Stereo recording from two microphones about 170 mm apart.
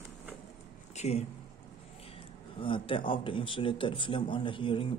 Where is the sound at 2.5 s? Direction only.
30° left (ahead or behind).